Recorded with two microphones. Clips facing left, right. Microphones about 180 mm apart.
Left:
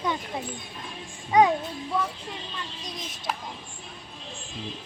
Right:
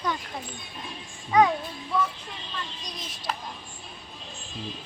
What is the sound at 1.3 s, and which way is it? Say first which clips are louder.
Speech: left 1 dB; 20° left (ahead or behind).